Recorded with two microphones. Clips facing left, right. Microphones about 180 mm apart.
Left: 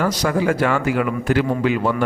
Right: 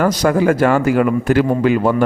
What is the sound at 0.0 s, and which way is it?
A man's voice, 50° right (ahead or behind).